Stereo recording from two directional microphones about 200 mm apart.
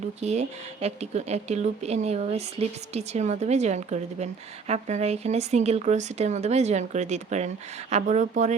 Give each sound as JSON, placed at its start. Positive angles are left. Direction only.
{"t": 0.2, "sound": "speech", "side_deg": -35}